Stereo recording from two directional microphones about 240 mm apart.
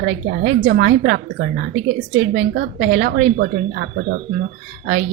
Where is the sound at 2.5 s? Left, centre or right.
Right.